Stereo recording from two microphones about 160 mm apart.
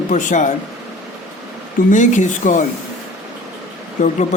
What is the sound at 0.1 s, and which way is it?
Speech, 50° left (ahead or behind).